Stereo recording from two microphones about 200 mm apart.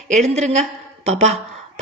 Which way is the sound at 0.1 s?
35° right (ahead or behind).